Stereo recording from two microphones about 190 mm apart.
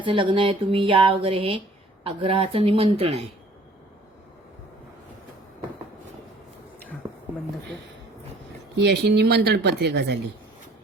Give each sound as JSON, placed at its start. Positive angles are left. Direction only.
{"t": 0.0, "sound": "speech", "side_deg": -25}
{"t": 7.0, "sound": "a sound", "side_deg": -25}
{"t": 8.8, "sound": "speech", "side_deg": -60}